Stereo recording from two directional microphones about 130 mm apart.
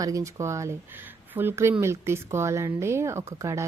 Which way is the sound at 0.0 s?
25° right (ahead or behind).